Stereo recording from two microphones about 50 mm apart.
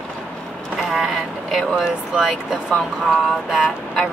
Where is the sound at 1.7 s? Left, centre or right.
Centre.